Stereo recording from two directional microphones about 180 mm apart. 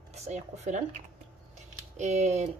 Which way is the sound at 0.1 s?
40° right (ahead or behind).